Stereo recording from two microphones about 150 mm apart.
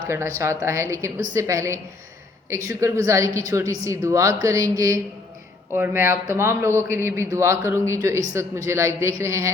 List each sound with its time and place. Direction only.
0.1 s a woman's voice: 20° right (ahead or behind)